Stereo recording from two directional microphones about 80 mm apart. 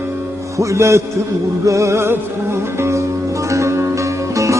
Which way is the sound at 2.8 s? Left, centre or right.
Right.